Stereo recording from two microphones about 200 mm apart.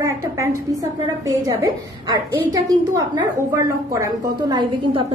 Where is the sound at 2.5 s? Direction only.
20° right (ahead or behind).